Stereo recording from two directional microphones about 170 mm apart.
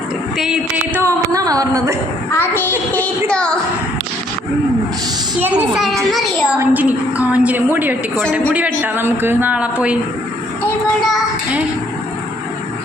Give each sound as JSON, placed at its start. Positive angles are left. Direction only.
{"t": 0.9, "sound": "a woman's voice", "side_deg": -20}
{"t": 2.3, "sound": "child singing", "side_deg": 15}
{"t": 5.4, "sound": "a child's voice", "side_deg": -5}